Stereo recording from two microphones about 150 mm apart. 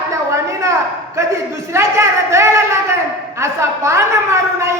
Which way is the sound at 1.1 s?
20° right (ahead or behind).